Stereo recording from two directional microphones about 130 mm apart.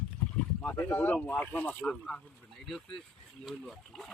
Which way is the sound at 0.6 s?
15° left (ahead or behind).